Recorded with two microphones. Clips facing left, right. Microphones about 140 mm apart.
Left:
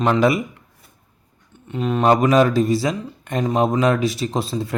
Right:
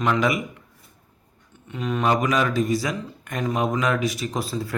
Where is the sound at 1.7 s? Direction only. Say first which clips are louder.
Left 6 dB; 30° left (ahead or behind).